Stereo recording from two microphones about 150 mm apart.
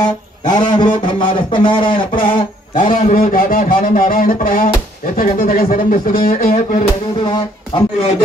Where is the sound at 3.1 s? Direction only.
65° left (ahead or behind).